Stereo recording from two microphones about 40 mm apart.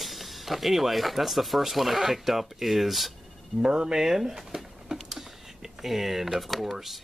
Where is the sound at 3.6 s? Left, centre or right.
Centre.